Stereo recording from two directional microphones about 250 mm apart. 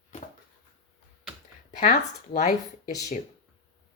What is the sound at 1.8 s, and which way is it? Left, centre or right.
Speech, left.